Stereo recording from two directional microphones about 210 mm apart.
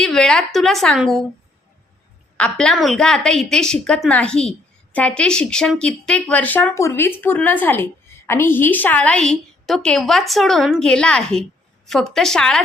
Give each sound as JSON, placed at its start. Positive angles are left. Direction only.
{"t": 0.0, "sound": "a woman's voice", "side_deg": 0}
{"t": 2.4, "sound": "a woman's voice", "side_deg": 5}